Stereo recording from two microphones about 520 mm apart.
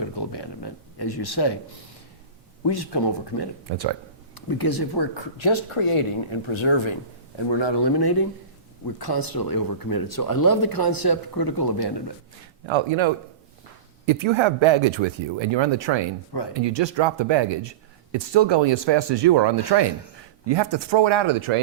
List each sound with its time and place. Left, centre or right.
0.0 s a sound: left
2.6 s speech: left
3.7 s speech: right
4.4 s speech: left
12.6 s speech: right